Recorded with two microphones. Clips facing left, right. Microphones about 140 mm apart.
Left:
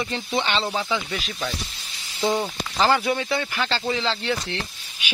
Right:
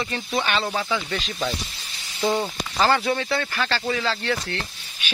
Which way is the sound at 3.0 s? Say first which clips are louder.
Even; 15° left (ahead or behind).